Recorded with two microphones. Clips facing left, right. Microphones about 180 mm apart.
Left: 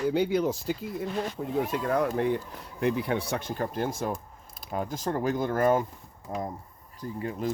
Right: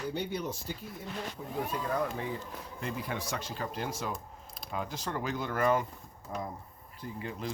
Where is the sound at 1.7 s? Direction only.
75° left (ahead or behind); by 5.9 s 45° left (ahead or behind).